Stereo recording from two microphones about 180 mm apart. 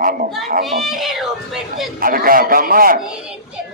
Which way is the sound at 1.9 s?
55° right (ahead or behind).